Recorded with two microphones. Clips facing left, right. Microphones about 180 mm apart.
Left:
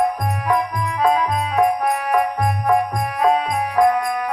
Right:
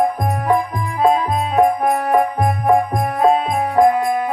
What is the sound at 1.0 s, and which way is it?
Music, 30° right (ahead or behind).